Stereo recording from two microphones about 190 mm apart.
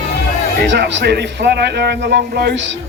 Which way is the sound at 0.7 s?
65° right (ahead or behind).